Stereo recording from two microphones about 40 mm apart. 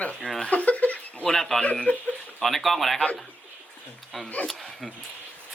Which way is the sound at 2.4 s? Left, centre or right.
Centre.